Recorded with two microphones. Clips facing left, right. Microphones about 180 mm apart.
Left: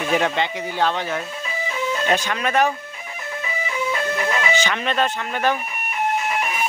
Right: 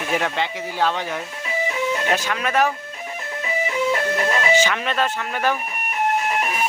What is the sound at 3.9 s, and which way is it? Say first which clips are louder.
Music: right 2 dB; 35° right (ahead or behind).